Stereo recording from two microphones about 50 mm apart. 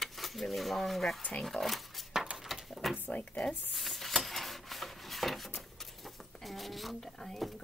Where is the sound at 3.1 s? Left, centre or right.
Left.